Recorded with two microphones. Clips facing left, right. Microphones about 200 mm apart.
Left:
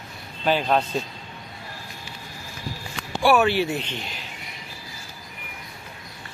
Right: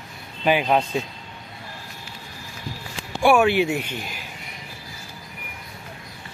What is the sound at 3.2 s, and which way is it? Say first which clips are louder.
Speech: right 2 dB; 15° right (ahead or behind).